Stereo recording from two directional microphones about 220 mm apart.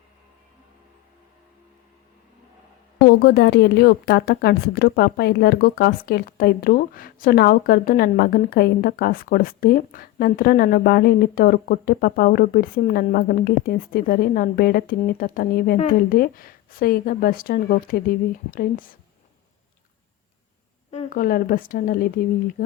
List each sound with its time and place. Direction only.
3.2 s speech: 45° left (ahead or behind)
20.9 s speech: 35° left (ahead or behind)